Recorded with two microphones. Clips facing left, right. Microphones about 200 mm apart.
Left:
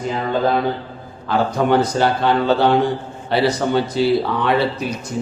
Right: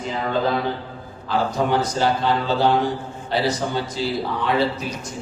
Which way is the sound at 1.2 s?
60° left (ahead or behind).